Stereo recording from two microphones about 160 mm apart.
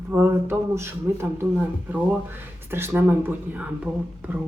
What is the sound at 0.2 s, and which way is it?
Speech, 15° right (ahead or behind).